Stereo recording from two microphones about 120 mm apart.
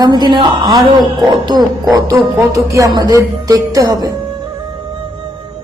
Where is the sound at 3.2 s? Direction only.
30° right (ahead or behind).